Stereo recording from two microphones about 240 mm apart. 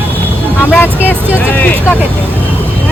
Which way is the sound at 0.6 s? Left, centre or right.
Centre.